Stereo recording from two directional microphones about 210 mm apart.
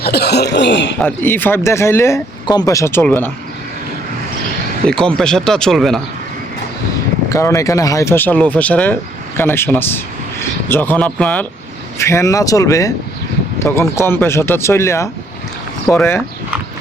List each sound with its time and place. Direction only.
0.0 s speech: 50° left (ahead or behind)
0.9 s speech: 10° left (ahead or behind)
4.9 s speech: 5° left (ahead or behind)
7.3 s speech: 15° left (ahead or behind)